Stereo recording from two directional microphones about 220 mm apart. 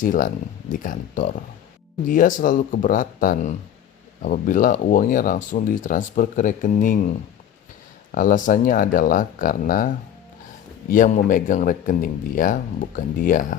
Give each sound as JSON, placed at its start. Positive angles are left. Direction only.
{"t": 0.0, "sound": "speech", "side_deg": 35}